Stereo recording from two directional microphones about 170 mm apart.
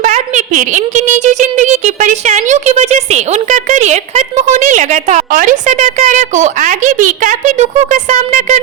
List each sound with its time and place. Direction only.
0.0 s speech: 45° right (ahead or behind)